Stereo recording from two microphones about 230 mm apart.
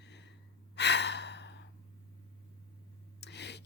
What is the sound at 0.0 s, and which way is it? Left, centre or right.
Gasp, left.